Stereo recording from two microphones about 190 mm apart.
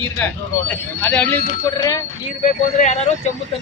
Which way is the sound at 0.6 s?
5° left (ahead or behind).